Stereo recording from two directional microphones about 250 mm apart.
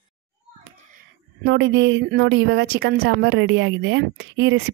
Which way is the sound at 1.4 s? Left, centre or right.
Right.